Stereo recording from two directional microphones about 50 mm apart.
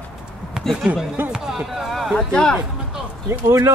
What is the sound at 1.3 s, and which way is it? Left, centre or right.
Chop, centre.